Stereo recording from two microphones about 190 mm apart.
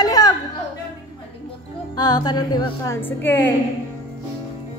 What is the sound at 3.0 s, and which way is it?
Speech, 10° left (ahead or behind).